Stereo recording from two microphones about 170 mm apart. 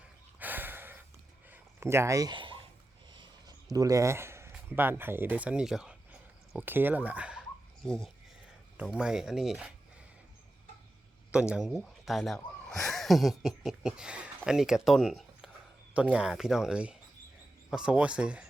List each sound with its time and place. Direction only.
0.3 s a sound: 10° right (ahead or behind); by 2.6 s 30° right (ahead or behind)
3.1 s speech: 25° right (ahead or behind); by 7.4 s 5° right (ahead or behind)
8.8 s speech: 5° right (ahead or behind)
11.3 s speech: 5° right (ahead or behind)